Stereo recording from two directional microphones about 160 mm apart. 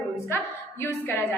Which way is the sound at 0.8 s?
15° left (ahead or behind).